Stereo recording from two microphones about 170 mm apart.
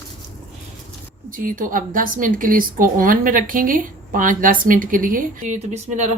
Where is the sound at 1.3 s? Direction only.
55° right (ahead or behind).